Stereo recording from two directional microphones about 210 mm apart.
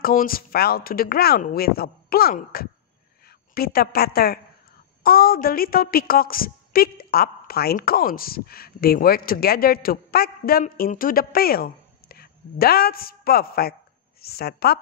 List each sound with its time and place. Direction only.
0.0 s a woman's voice: 45° left (ahead or behind)